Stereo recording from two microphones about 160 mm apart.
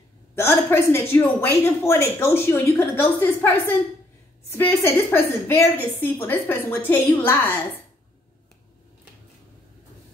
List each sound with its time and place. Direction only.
0.4 s a woman's voice: 15° left (ahead or behind)